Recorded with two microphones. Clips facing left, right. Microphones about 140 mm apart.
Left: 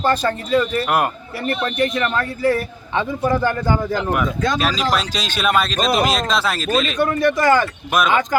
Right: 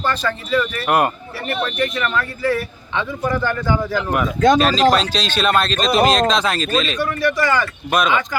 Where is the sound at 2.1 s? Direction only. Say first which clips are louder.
Left 1 dB; 40° left (ahead or behind).